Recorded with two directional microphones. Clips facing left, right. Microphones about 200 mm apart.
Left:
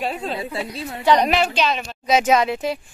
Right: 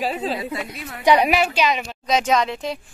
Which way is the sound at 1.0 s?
10° right (ahead or behind).